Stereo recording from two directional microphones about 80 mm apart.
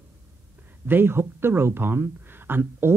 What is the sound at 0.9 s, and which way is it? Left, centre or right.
Speech, right.